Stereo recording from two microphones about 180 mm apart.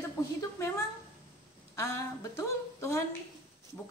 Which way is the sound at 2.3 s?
15° left (ahead or behind).